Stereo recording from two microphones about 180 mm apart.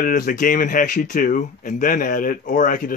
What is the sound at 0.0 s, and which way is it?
Speech, 50° left (ahead or behind).